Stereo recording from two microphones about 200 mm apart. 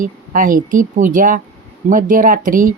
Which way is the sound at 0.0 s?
45° right (ahead or behind).